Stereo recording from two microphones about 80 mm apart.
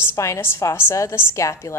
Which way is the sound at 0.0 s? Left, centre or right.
Left.